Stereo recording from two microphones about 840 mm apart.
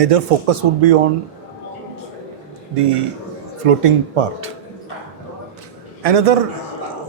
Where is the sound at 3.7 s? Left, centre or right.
Right.